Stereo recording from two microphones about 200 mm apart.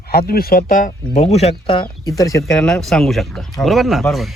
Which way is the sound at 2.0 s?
15° left (ahead or behind).